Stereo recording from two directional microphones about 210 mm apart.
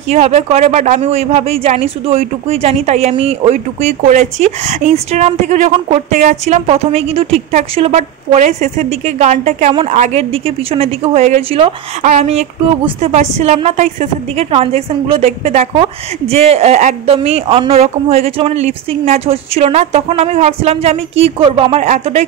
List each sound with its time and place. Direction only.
0.1 s speech: 30° right (ahead or behind)